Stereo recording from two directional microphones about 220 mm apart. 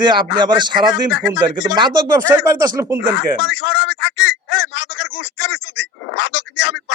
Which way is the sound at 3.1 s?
55° left (ahead or behind).